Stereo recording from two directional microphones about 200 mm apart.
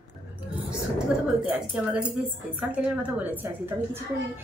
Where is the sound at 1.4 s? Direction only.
5° right (ahead or behind).